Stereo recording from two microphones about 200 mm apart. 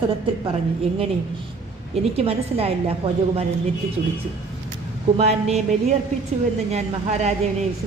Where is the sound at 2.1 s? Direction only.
30° right (ahead or behind).